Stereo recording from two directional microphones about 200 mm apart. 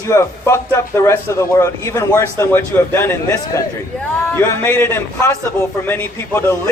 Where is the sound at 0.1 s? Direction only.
15° left (ahead or behind).